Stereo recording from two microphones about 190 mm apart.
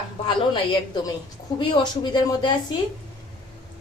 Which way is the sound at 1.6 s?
25° left (ahead or behind).